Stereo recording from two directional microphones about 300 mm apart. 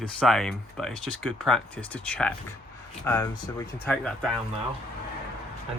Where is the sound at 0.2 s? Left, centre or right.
Centre.